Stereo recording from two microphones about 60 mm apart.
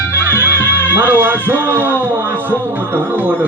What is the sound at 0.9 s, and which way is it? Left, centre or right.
A man's voice, right.